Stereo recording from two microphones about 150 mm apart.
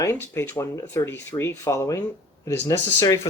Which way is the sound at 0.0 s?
15° left (ahead or behind).